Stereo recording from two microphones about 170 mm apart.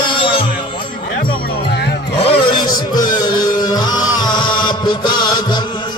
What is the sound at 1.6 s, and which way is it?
Music, 75° left (ahead or behind).